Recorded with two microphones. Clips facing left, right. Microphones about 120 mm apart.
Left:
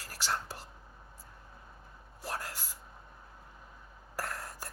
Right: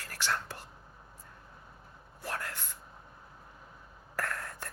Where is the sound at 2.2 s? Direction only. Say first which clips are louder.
Right 1 dB; 15° left (ahead or behind).